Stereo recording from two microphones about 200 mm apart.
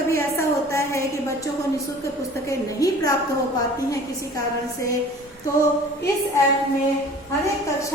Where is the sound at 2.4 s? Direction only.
15° left (ahead or behind).